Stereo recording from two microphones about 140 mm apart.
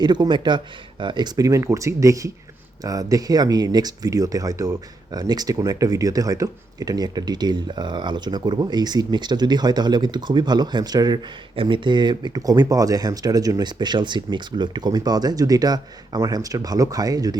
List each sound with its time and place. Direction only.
0.0 s speech: 30° right (ahead or behind)